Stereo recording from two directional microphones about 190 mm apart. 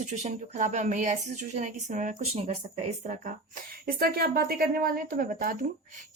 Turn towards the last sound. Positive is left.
turn(degrees=-45)  # may be behind; listen again after turning